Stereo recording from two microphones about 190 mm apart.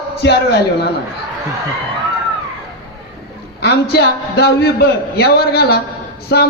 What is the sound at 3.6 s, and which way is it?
A man's voice, 60° left (ahead or behind).